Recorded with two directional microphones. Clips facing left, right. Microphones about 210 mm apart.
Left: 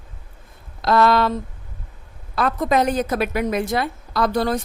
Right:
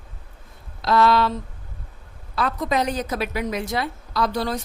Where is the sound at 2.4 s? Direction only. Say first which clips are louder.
Left 4 dB; 50° left (ahead or behind).